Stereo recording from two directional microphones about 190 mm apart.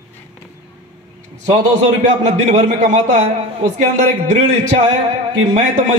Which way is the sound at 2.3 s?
35° right (ahead or behind).